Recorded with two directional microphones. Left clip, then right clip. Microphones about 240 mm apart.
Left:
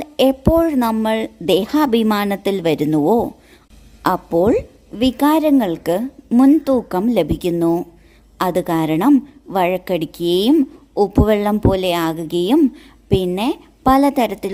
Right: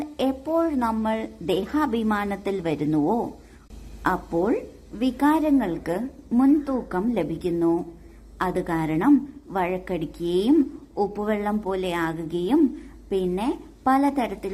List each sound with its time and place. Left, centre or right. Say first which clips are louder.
0.0 s a woman's voice: left 11 dB; left